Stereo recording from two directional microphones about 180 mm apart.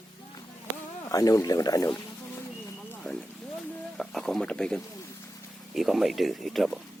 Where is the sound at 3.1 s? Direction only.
Centre (ahead or behind).